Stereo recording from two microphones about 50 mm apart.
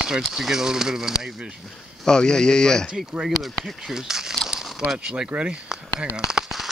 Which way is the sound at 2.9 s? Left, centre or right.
Centre.